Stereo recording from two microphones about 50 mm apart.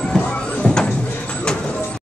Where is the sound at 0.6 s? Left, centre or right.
Centre.